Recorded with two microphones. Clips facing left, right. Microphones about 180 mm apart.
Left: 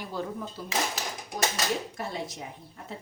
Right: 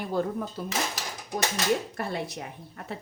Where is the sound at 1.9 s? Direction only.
65° right (ahead or behind).